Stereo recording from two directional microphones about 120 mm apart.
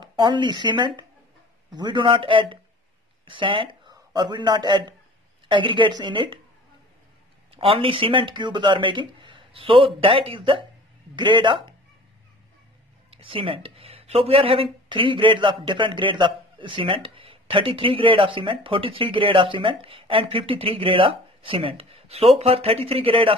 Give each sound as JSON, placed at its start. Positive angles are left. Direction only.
{"t": 0.0, "sound": "a man's voice", "side_deg": -40}
{"t": 7.5, "sound": "speech", "side_deg": -50}
{"t": 13.2, "sound": "speech", "side_deg": -50}